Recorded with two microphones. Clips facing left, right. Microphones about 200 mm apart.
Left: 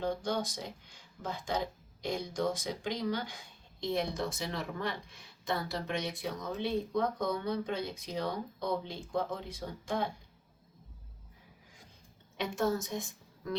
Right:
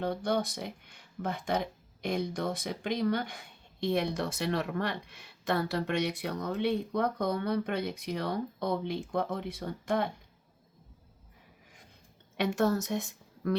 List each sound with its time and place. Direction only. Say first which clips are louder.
0.0 s speech: right 3 dB; 60° right (ahead or behind)
12.4 s a woman's voice: right 4 dB; 70° right (ahead or behind)